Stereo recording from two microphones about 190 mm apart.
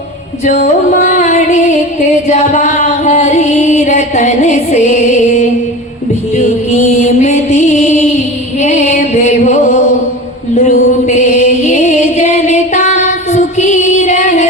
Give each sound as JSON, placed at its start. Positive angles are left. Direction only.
{"t": 0.4, "sound": "music", "side_deg": 35}